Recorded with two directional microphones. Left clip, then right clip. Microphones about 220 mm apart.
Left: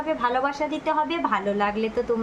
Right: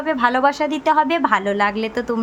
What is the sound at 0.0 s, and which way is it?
A woman's voice, 50° right (ahead or behind).